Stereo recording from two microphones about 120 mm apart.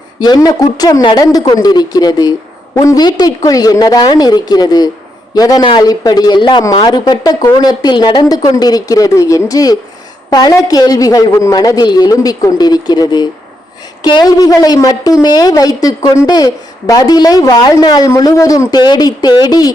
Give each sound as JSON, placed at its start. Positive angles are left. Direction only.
{"t": 0.2, "sound": "a woman's voice", "side_deg": 35}